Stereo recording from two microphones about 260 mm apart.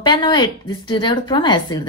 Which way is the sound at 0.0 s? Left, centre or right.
Centre.